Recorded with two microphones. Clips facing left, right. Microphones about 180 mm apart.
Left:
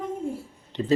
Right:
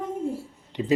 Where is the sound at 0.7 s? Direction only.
15° right (ahead or behind).